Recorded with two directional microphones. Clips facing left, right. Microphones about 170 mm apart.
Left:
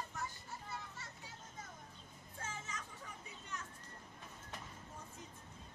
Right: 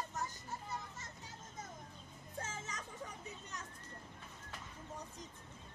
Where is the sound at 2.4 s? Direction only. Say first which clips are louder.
Right 1 dB; 40° right (ahead or behind).